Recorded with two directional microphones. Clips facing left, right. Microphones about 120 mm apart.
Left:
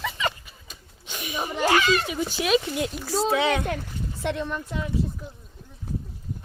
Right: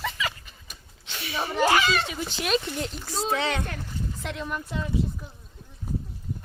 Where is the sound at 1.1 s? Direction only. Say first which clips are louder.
Even; 15° left (ahead or behind).